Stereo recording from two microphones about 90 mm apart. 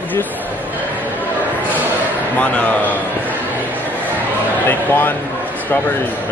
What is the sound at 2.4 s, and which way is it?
Speech, 15° left (ahead or behind).